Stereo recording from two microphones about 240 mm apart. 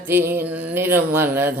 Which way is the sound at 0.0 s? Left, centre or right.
Centre.